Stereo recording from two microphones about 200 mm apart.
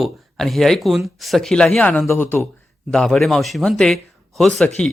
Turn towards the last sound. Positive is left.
turn(degrees=5)  # may be behind; listen again after turning